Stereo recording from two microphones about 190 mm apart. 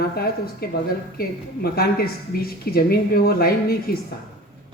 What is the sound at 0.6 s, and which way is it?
A woman's voice, 55° left (ahead or behind).